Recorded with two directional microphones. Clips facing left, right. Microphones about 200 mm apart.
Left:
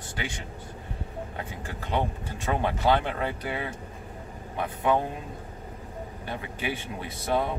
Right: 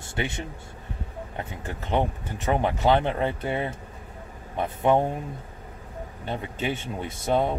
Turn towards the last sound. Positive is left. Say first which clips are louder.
# right 3 dB
turn(degrees=-25)  # may be behind; listen again after turning